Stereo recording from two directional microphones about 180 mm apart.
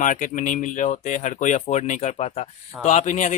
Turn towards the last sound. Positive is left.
turn(degrees=45)  # may be behind; listen again after turning